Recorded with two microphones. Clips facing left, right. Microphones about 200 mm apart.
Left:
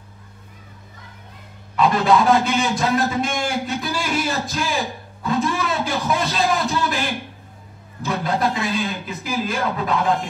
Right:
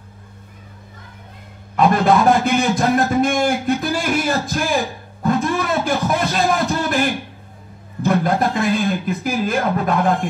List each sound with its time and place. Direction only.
1.8 s a man's voice: 50° right (ahead or behind)
8.0 s speech: 50° right (ahead or behind)